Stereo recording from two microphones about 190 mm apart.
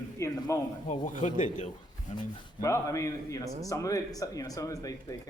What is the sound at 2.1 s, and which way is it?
Speech, 15° left (ahead or behind).